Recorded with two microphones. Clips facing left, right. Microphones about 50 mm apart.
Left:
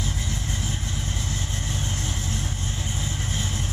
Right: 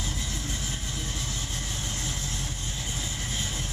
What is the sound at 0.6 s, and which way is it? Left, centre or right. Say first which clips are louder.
Vehicle: left 4 dB; left.